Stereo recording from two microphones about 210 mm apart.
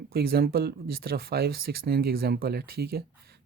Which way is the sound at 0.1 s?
45° right (ahead or behind).